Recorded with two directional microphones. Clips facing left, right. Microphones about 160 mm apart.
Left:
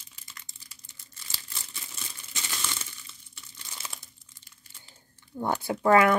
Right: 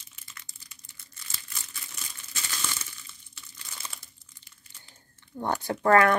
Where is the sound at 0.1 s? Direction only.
35° left (ahead or behind).